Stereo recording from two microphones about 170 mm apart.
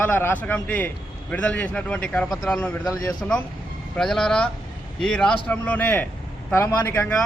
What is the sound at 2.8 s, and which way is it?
Speech, 20° left (ahead or behind).